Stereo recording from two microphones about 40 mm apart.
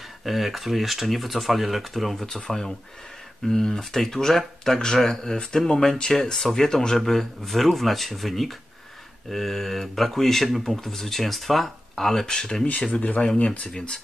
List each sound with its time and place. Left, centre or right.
0.2 s speech: centre
2.4 s speech: centre
13.4 s speech: left